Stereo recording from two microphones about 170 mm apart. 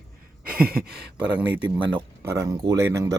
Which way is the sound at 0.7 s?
65° right (ahead or behind).